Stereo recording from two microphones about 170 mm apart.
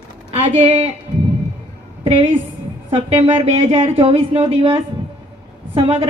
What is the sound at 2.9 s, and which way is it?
A woman's voice, 35° right (ahead or behind).